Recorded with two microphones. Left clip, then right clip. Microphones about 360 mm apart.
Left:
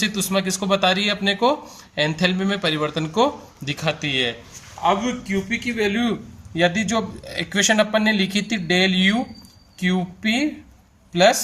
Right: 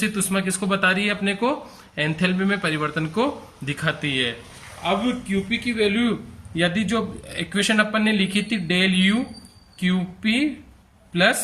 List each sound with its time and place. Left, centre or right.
0.0 s speech: centre